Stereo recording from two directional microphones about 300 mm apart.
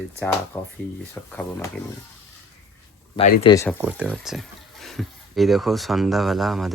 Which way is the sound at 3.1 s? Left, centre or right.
Left.